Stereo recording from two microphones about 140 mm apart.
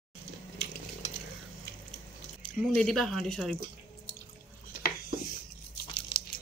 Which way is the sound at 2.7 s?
5° left (ahead or behind).